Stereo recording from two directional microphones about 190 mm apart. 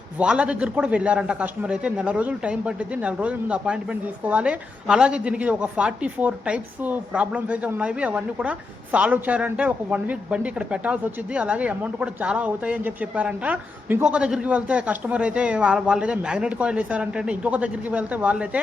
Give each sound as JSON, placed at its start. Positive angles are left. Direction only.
{"t": 0.2, "sound": "a man's voice", "side_deg": -5}